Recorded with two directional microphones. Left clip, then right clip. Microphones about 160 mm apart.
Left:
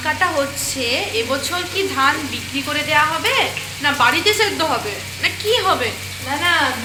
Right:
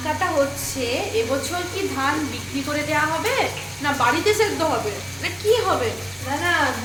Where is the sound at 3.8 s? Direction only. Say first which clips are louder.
Left 4 dB; 10° left (ahead or behind).